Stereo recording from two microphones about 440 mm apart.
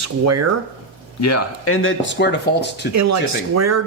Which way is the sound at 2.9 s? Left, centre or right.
Right.